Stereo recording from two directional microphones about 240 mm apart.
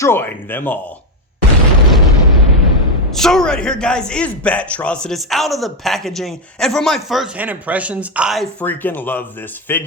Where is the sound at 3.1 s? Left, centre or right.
Centre.